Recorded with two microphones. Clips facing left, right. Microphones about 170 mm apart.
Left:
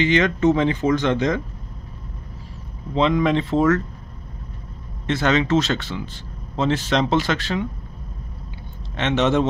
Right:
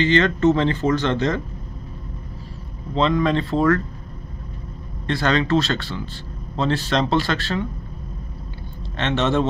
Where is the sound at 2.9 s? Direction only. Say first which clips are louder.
Left 1 dB; 15° left (ahead or behind).